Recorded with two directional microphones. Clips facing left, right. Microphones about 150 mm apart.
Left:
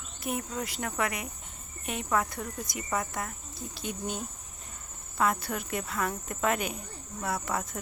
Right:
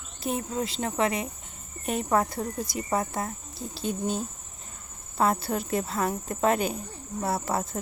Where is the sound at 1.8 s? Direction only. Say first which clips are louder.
Right 5 dB; 40° right (ahead or behind).